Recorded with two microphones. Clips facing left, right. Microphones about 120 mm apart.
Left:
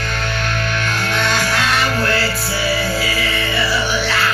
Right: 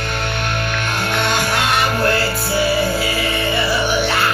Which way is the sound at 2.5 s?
50° right (ahead or behind).